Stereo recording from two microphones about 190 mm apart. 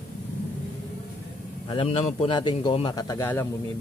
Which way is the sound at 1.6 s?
30° left (ahead or behind).